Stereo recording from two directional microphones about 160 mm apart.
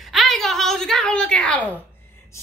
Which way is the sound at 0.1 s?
Centre (ahead or behind).